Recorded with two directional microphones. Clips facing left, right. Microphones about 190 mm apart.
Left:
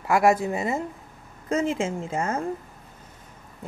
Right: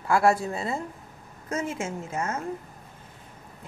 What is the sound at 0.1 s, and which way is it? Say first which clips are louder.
Speech: left 2 dB; 15° left (ahead or behind).